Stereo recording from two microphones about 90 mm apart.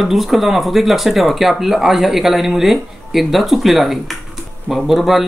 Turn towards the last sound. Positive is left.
turn(degrees=0)  # may be behind; listen again after turning